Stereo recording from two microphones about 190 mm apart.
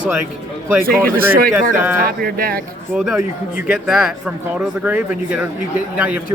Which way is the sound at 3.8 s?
Centre (ahead or behind).